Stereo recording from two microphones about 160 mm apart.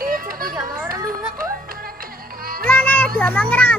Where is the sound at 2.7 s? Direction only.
10° left (ahead or behind).